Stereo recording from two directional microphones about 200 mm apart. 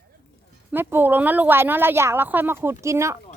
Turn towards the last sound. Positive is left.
turn(degrees=-15)  # may be behind; listen again after turning